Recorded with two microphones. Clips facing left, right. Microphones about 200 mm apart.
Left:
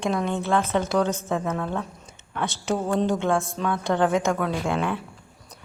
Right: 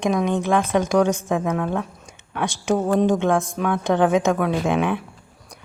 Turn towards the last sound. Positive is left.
turn(degrees=-15)  # may be behind; listen again after turning